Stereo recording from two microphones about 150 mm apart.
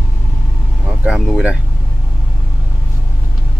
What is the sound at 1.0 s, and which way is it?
Speech, 5° right (ahead or behind).